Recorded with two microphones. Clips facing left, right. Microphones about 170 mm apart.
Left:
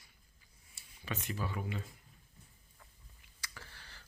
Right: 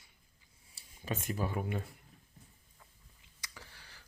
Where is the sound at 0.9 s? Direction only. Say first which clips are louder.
Right 4 dB; 45° right (ahead or behind).